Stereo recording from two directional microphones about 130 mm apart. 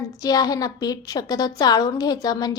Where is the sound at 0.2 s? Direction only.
30° left (ahead or behind).